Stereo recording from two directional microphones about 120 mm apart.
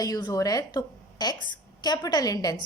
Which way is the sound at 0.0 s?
30° left (ahead or behind).